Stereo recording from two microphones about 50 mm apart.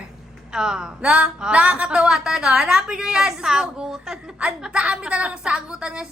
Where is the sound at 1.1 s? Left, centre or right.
Right.